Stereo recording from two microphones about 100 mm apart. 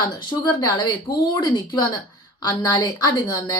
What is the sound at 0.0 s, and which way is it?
A woman's voice, 40° left (ahead or behind).